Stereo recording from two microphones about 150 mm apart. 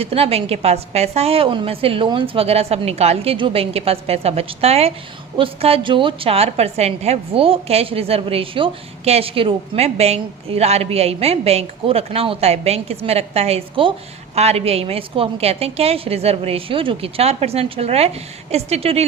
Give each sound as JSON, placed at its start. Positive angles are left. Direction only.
{"t": 0.0, "sound": "a woman's voice", "side_deg": -40}